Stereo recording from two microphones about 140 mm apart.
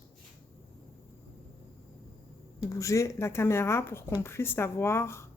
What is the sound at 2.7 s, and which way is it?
Speech, 20° left (ahead or behind).